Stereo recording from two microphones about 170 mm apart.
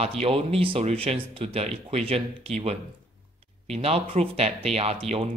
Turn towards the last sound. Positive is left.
turn(degrees=-35)  # may be behind; listen again after turning